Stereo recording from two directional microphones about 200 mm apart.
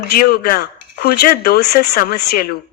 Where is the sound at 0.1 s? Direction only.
50° left (ahead or behind).